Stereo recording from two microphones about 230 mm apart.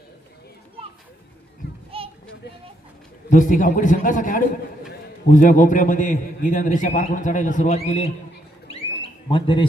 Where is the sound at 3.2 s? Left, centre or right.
Left.